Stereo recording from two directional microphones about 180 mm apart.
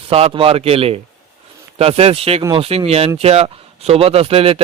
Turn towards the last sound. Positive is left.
turn(degrees=-35)  # may be behind; listen again after turning